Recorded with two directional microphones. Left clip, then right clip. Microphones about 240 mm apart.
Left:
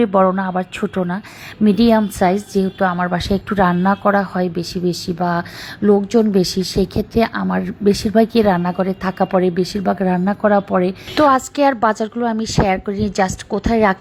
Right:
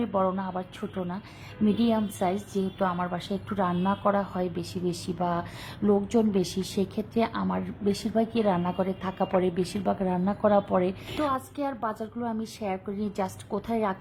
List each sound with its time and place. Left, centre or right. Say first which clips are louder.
0.0 s a woman's voice: left 13 dB; left
11.2 s a woman's voice: left 16 dB; left